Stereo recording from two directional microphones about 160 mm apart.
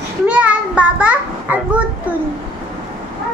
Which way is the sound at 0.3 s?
5° right (ahead or behind).